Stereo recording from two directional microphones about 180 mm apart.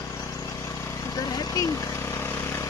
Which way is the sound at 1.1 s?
20° left (ahead or behind).